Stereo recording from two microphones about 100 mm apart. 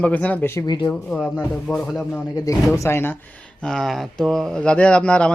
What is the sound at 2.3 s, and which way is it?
Speech, 35° left (ahead or behind).